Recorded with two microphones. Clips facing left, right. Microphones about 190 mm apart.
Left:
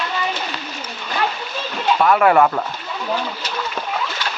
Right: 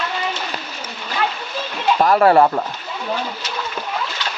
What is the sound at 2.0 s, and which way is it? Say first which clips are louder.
Speech: right 1 dB; 35° right (ahead or behind).